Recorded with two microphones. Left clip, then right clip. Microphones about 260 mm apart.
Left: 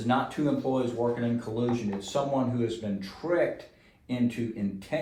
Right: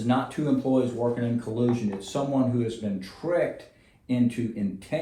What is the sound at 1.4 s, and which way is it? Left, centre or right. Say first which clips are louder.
Speech: right 3 dB; left.